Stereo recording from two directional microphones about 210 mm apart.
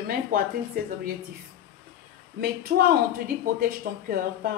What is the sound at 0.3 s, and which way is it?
Speech, 40° right (ahead or behind).